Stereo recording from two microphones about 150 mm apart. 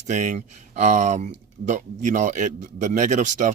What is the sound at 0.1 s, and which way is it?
Speech, 55° right (ahead or behind).